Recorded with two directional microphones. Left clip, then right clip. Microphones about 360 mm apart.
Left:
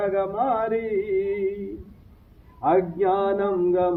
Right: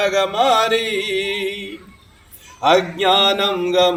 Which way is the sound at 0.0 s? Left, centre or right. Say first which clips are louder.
Right 7 dB; right.